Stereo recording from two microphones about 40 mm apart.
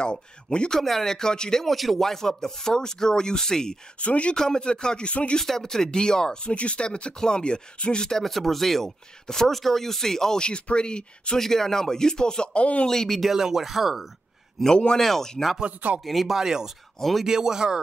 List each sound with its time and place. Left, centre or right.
0.0 s speech: left
0.7 s speech: centre
1.7 s speech: centre
4.0 s speech: left
4.4 s speech: centre
5.4 s speech: centre
6.5 s speech: left
8.2 s speech: centre
10.4 s speech: left
11.3 s speech: centre
13.2 s speech: centre
16.3 s speech: centre
17.0 s speech: centre
17.3 s speech: centre